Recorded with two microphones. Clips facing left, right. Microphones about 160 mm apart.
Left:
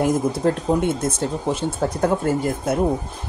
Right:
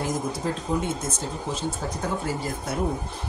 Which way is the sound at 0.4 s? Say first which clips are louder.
Left 8 dB; 60° left (ahead or behind).